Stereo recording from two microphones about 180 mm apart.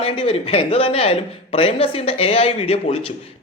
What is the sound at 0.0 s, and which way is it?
Speech, 30° left (ahead or behind).